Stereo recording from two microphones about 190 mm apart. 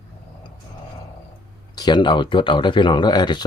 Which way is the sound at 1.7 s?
25° left (ahead or behind).